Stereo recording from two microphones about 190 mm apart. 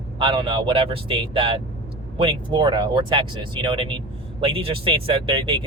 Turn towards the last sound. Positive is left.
turn(degrees=-25)  # may be behind; listen again after turning